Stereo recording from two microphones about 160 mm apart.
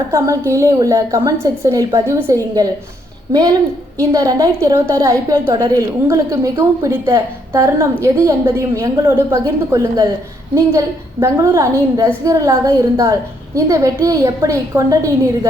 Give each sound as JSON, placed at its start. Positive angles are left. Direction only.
{"t": 0.5, "sound": "a woman's voice", "side_deg": -20}